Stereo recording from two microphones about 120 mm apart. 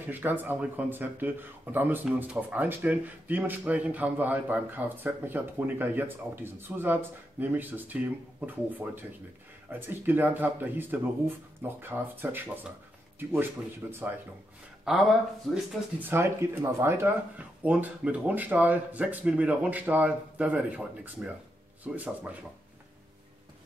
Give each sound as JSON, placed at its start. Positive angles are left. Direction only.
{"t": 0.0, "sound": "speech", "side_deg": -15}
{"t": 14.9, "sound": "speech", "side_deg": -5}
{"t": 16.0, "sound": "speech", "side_deg": -20}